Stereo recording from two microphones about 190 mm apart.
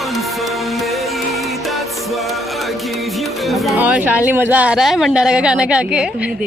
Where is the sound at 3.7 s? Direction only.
10° right (ahead or behind).